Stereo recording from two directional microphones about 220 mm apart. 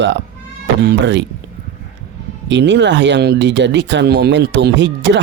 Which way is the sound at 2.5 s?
55° right (ahead or behind).